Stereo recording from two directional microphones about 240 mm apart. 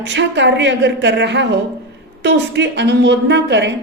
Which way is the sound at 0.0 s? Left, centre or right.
Right.